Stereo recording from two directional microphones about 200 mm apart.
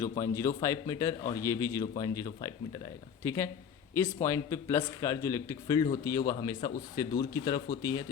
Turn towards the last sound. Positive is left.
turn(degrees=20)  # may be behind; listen again after turning